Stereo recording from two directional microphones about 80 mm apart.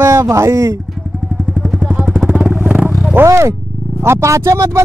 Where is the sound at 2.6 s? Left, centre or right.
Centre.